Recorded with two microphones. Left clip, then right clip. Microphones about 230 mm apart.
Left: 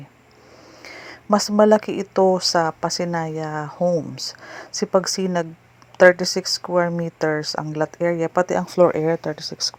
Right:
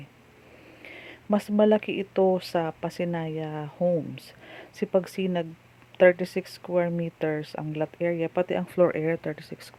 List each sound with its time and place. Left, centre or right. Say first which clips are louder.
1.0 s speech: left 8 dB; centre